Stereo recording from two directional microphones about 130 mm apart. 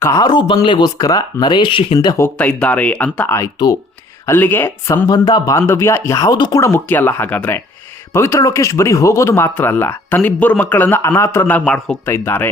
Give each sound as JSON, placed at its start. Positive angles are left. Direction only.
{"t": 0.0, "sound": "speech", "side_deg": 25}
{"t": 2.1, "sound": "speech", "side_deg": 20}
{"t": 5.0, "sound": "speech", "side_deg": 30}
{"t": 6.6, "sound": "speech", "side_deg": 20}